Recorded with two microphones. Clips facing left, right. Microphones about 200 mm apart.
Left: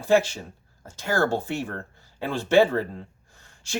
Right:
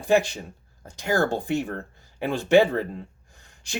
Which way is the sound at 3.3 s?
15° right (ahead or behind).